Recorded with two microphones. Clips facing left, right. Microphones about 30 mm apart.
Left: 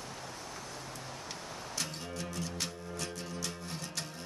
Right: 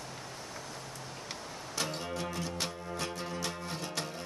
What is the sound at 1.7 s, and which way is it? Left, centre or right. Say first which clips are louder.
Music: right 5 dB; right.